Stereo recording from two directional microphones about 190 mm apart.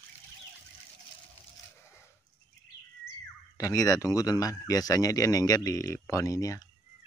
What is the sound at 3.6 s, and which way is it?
Speech, 15° left (ahead or behind).